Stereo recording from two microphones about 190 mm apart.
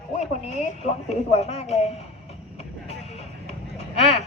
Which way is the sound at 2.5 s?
35° left (ahead or behind).